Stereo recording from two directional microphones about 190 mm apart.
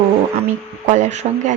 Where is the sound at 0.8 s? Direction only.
40° right (ahead or behind).